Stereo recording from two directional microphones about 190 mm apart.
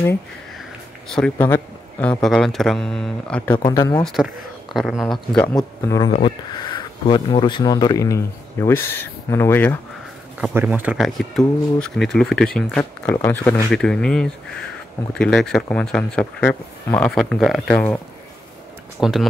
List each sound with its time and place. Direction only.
1.1 s speech: 5° left (ahead or behind)
3.5 s speech: 20° left (ahead or behind)
4.0 s speech: centre (ahead or behind)
10.4 s speech: 10° right (ahead or behind)